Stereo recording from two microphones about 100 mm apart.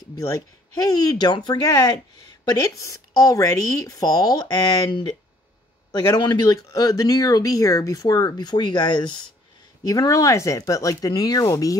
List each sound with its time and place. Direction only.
0.1 s speech: 35° left (ahead or behind)
9.8 s speech: 35° left (ahead or behind)